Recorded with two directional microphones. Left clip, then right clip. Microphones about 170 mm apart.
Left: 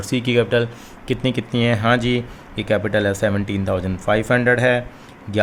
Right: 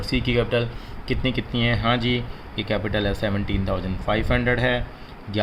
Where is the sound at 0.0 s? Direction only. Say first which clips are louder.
Left 4 dB; 35° left (ahead or behind).